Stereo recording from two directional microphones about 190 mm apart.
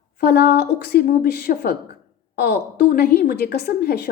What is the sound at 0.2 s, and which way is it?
A woman's voice, 60° left (ahead or behind).